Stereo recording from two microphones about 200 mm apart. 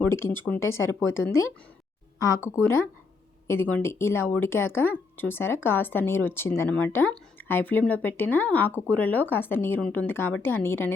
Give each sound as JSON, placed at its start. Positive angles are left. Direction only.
{"t": 0.0, "sound": "speech", "side_deg": 10}
{"t": 2.1, "sound": "speech", "side_deg": 15}